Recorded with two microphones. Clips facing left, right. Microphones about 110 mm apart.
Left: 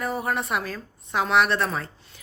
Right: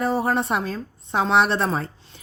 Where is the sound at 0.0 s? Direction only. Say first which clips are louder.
Right 5 dB; 30° right (ahead or behind).